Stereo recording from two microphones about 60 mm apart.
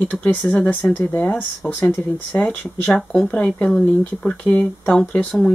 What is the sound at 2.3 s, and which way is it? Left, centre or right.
Speech, left.